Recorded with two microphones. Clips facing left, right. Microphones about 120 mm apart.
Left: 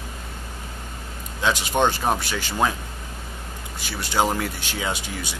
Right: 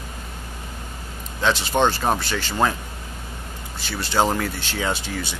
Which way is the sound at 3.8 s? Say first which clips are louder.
Right 2 dB; 10° left (ahead or behind).